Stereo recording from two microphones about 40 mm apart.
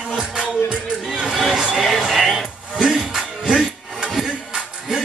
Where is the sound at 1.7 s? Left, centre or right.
Centre.